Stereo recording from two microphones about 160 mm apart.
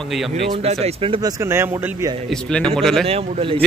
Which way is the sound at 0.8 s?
35° right (ahead or behind).